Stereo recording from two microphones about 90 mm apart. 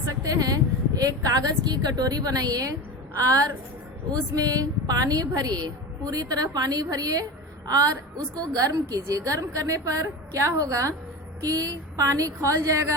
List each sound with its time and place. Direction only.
0.0 s a woman's voice: 40° right (ahead or behind)